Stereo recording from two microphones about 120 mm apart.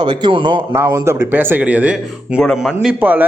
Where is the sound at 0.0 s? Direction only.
40° right (ahead or behind).